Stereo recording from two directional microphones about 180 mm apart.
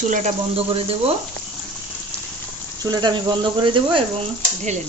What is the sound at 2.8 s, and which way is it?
Speech, 25° right (ahead or behind).